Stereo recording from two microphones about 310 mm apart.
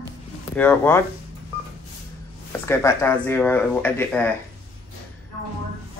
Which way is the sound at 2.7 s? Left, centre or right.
Centre.